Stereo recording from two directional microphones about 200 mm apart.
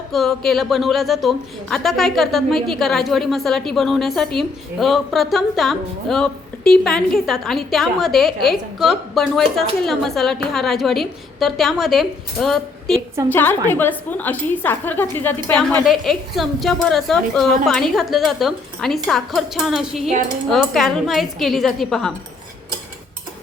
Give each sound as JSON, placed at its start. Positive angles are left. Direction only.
{"t": 0.1, "sound": "a woman's voice", "side_deg": 0}